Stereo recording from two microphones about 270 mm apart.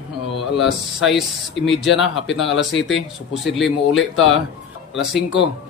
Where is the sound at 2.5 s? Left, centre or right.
Left.